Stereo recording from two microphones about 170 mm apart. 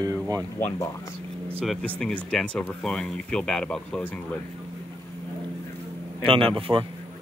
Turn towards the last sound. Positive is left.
turn(degrees=-30)  # may be behind; listen again after turning